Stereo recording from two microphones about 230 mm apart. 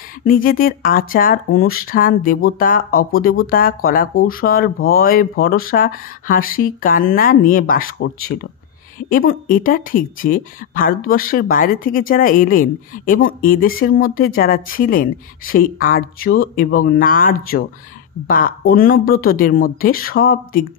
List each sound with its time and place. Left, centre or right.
0.2 s speech: left